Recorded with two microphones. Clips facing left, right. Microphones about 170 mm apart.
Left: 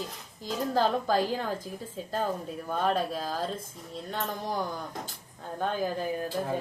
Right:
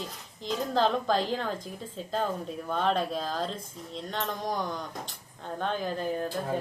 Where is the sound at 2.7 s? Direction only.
5° left (ahead or behind).